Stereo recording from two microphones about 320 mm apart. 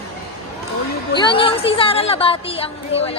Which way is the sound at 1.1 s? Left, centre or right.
Centre.